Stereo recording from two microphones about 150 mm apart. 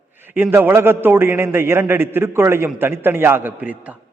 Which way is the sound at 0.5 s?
15° right (ahead or behind).